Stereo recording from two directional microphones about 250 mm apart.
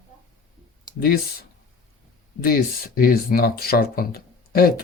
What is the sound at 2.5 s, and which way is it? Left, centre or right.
Speech, left.